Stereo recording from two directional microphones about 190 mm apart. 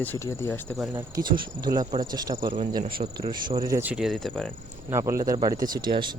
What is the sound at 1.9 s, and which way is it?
Speech, 20° right (ahead or behind).